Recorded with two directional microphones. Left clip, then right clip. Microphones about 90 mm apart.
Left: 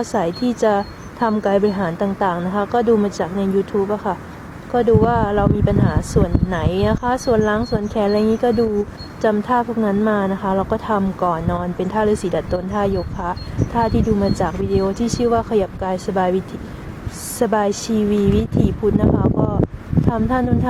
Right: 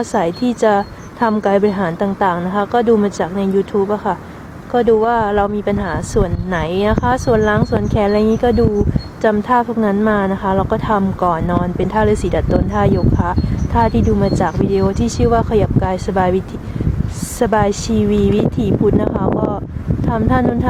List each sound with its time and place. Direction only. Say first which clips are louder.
0.0 s speech: right 3 dB; 5° right (ahead or behind)
17.4 s speech: right 3 dB; 5° right (ahead or behind)
20.1 s speech: right 3 dB; 5° right (ahead or behind)